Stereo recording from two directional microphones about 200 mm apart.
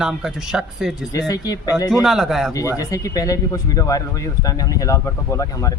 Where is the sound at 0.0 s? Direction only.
5° right (ahead or behind).